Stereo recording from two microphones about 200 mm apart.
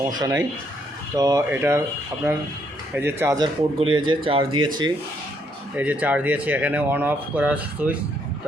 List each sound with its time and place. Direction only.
0.0 s speech: 20° right (ahead or behind)
2.9 s speech: 10° right (ahead or behind)
5.7 s speech: 5° right (ahead or behind)